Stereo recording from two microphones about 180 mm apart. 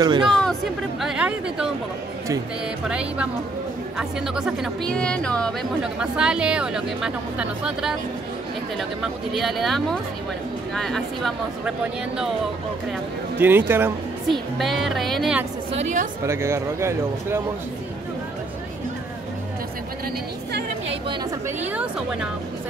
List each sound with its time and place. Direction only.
0.0 s speech: 25° right (ahead or behind)
0.3 s a woman's voice: 5° left (ahead or behind)
2.9 s a woman's voice: 5° right (ahead or behind)
4.4 s a woman's voice: 5° right (ahead or behind)
13.4 s speech: 10° right (ahead or behind)
14.3 s a woman's voice: centre (ahead or behind)
15.7 s a woman's voice: 40° right (ahead or behind)
16.3 s speech: 15° right (ahead or behind)
21.7 s a woman's voice: 5° right (ahead or behind)